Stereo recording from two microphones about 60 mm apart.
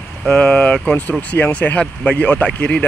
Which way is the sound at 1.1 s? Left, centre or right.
Left.